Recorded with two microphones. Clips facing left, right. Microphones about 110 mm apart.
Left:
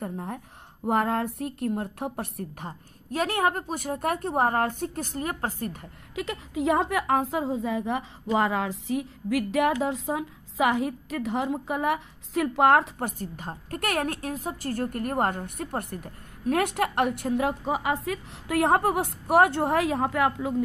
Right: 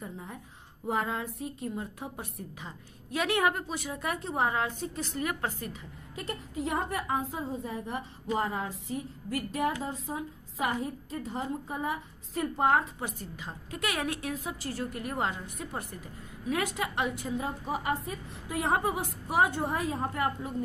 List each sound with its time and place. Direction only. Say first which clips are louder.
0.0 s a woman's voice: left 8 dB; 60° left (ahead or behind)
3.1 s a woman's voice: left 2 dB; 40° left (ahead or behind)
6.1 s a woman's voice: left 6 dB; 90° left
13.0 s a woman's voice: left 6 dB; 50° left (ahead or behind); by 20.5 s 90° left